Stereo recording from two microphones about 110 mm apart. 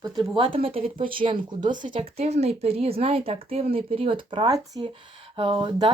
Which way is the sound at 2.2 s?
80° right.